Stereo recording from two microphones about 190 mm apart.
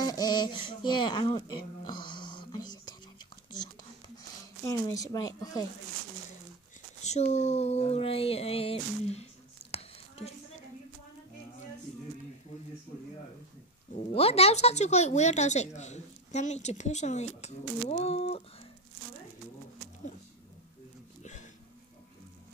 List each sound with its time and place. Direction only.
0.0 s music: 20° left (ahead or behind)
4.4 s a woman's voice: 15° left (ahead or behind)
7.0 s speech: 35° left (ahead or behind)
12.9 s a sound: 40° left (ahead or behind)
13.9 s speech: 30° left (ahead or behind)
21.2 s a sound: 40° left (ahead or behind)